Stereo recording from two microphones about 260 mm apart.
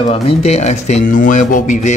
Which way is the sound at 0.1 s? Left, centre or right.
Left.